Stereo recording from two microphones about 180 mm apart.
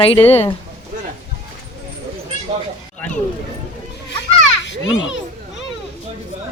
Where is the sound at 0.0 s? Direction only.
35° left (ahead or behind).